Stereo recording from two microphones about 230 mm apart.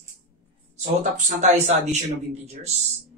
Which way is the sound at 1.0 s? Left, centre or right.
Right.